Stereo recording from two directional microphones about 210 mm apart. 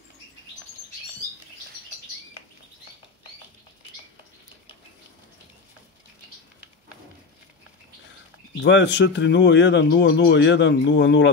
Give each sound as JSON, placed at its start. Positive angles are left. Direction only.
{"t": 8.6, "sound": "speech", "side_deg": 55}